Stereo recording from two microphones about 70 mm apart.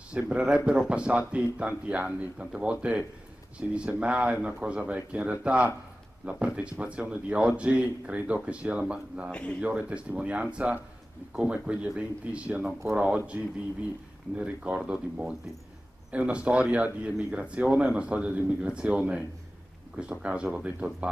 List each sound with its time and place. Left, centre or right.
0.1 s speech: centre